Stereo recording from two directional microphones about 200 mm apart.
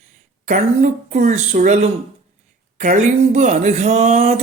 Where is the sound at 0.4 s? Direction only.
40° right (ahead or behind).